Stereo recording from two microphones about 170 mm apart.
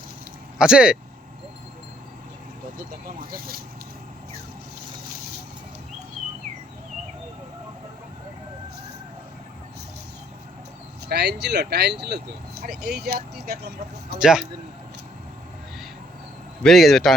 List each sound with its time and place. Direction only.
0.6 s speech: 5° right (ahead or behind)
2.7 s speech: 55° right (ahead or behind)
11.1 s speech: 75° right (ahead or behind)
14.2 s speech: 5° right (ahead or behind)
16.6 s speech: centre (ahead or behind)